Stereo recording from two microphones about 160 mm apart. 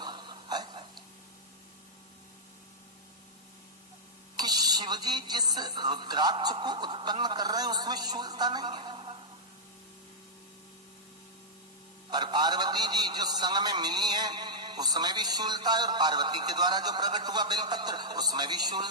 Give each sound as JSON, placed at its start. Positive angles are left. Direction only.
{"t": 0.0, "sound": "hiccup", "side_deg": -30}
{"t": 4.4, "sound": "a man's voice", "side_deg": -25}
{"t": 12.1, "sound": "a man's voice", "side_deg": -25}